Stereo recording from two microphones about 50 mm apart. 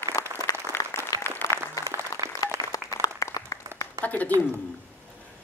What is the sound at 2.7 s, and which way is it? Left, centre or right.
Applause, left.